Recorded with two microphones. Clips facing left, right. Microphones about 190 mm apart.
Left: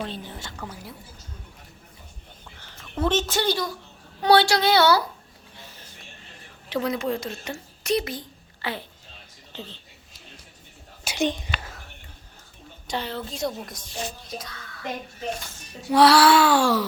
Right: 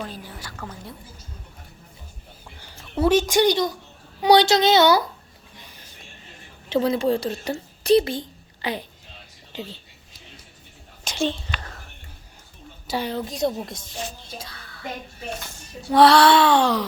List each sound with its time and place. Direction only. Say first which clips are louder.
0.0 s a woman's voice: left 1 dB; 25° left (ahead or behind)
0.5 s speech: right 1 dB; 5° left (ahead or behind)
2.6 s a woman's voice: right 4 dB; 10° right (ahead or behind)
5.5 s a sound: left 1 dB; 15° right (ahead or behind)
6.7 s speech: right 5 dB; 30° right (ahead or behind); by 9.7 s 15° right (ahead or behind)
11.0 s whispering: even; 10° left (ahead or behind)
12.9 s a woman's voice: right 4 dB; 15° right (ahead or behind)
14.3 s music: left 2 dB; 30° right (ahead or behind)
15.9 s music: right 2 dB; 5° left (ahead or behind)
16.5 s a child's voice: right 1 dB; 20° right (ahead or behind)